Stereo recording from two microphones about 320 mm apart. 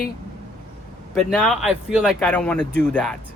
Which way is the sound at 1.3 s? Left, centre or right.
Centre.